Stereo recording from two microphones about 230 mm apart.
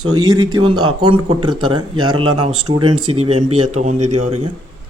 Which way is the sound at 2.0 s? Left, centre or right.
Right.